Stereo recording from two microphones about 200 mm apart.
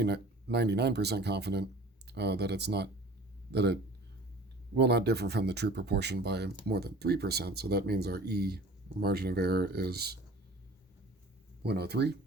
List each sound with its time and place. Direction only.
0.0 s speech: 55° right (ahead or behind)
4.8 s speech: 55° right (ahead or behind)
11.6 s speech: 55° right (ahead or behind)